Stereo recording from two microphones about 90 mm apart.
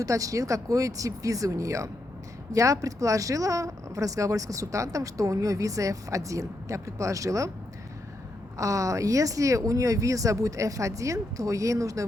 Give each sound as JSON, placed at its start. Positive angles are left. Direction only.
{"t": 0.0, "sound": "speech", "side_deg": -40}
{"t": 8.5, "sound": "speech", "side_deg": -35}